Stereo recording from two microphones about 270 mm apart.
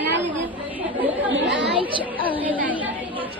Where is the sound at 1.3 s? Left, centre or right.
Right.